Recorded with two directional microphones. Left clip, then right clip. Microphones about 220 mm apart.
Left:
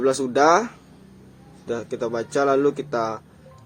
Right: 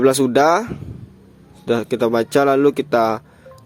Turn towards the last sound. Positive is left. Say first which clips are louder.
# right 8 dB
turn(degrees=-40)  # may be behind; listen again after turning